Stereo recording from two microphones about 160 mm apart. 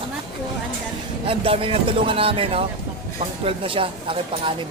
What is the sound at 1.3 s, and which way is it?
A man's voice, 35° right (ahead or behind).